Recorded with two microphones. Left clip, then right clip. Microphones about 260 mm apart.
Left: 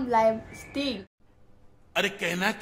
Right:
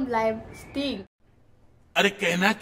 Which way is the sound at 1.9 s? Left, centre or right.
Centre.